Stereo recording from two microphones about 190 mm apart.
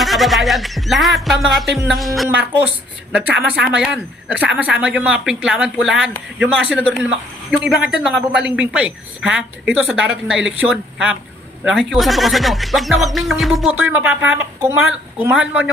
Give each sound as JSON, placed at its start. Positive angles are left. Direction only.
{"t": 0.0, "sound": "speech", "side_deg": 0}
{"t": 3.5, "sound": "speech", "side_deg": -5}